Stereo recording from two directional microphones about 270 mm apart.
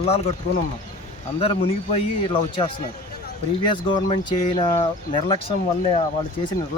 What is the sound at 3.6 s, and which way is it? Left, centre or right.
Speech, centre.